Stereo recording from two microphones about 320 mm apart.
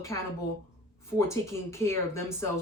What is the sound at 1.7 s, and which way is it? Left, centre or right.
Speech, centre.